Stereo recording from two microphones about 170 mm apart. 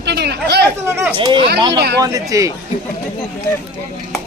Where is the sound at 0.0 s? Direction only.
75° right (ahead or behind).